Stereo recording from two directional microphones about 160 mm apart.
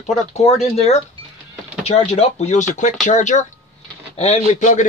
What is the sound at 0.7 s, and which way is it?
A man's voice, 40° left (ahead or behind).